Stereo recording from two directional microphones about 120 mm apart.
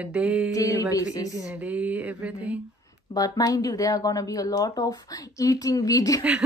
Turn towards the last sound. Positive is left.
turn(degrees=-10)  # may be behind; listen again after turning